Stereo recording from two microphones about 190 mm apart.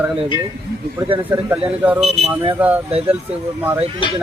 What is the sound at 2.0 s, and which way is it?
Speech, 30° right (ahead or behind).